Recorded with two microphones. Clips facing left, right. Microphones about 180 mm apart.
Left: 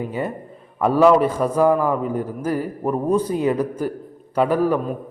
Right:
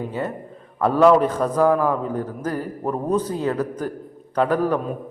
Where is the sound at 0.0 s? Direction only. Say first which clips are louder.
Left 1 dB; 10° left (ahead or behind).